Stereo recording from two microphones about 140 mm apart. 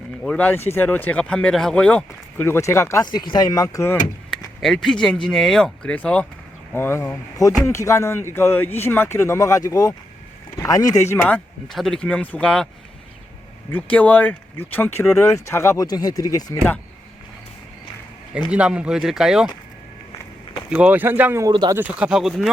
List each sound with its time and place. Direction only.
0.2 s speech: 10° left (ahead or behind)
4.3 s speech: 5° left (ahead or behind); by 11.2 s 20° left (ahead or behind)
11.3 s speech: 5° left (ahead or behind)
13.7 s speech: 10° left (ahead or behind)
18.5 s speech: 10° right (ahead or behind)
20.7 s speech: 10° right (ahead or behind)
21.5 s speech: 35° right (ahead or behind)
21.8 s speech: 10° right (ahead or behind)